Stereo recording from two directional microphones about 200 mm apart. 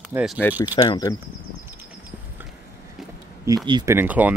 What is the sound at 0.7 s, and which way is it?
Speech, 20° left (ahead or behind).